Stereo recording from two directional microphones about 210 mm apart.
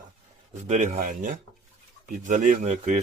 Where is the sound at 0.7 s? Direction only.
40° right (ahead or behind).